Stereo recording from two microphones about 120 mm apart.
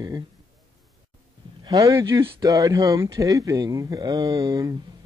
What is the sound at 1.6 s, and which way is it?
Speech, 30° right (ahead or behind).